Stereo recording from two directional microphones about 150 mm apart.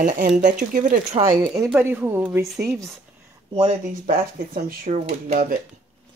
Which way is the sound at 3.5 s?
50° right (ahead or behind).